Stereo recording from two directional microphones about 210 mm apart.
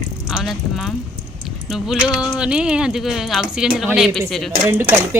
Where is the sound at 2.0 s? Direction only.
5° right (ahead or behind).